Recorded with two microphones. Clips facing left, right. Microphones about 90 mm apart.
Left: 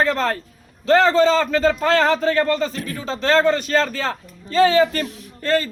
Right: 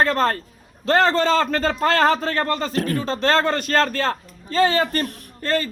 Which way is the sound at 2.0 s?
40° right (ahead or behind).